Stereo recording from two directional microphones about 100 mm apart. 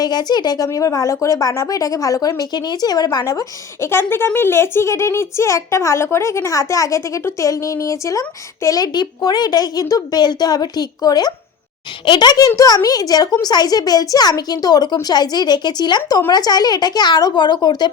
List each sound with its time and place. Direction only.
0.0 s a woman's voice: 45° left (ahead or behind)